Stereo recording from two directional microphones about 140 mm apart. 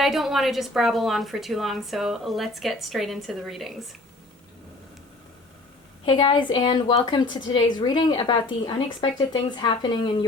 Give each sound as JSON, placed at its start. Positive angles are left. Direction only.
{"t": 0.0, "sound": "a woman's voice", "side_deg": 0}
{"t": 6.1, "sound": "a woman's voice", "side_deg": 35}